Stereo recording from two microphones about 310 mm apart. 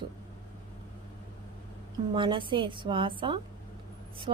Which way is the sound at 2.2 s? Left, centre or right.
Centre.